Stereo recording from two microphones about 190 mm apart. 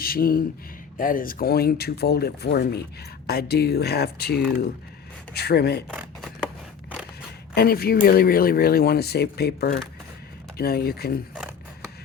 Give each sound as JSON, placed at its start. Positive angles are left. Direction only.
{"t": 0.0, "sound": "speech", "side_deg": 50}
{"t": 7.5, "sound": "speech", "side_deg": 55}